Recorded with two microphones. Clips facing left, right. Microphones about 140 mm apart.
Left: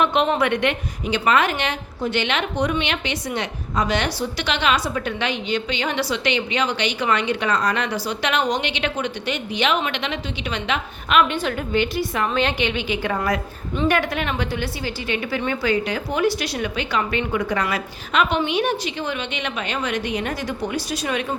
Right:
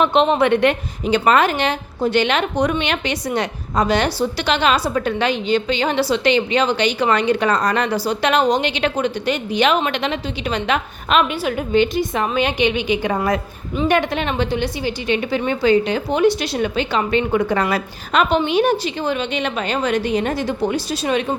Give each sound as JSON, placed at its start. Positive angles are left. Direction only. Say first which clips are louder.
{"t": 0.0, "sound": "a woman's voice", "louder": "right 4 dB", "side_deg": -30}
{"t": 11.3, "sound": "a woman's voice", "louder": "right 2 dB", "side_deg": -10}
{"t": 11.7, "sound": "a woman's voice", "louder": "right 6 dB", "side_deg": -25}